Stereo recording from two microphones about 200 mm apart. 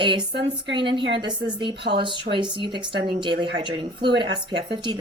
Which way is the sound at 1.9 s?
45° right (ahead or behind).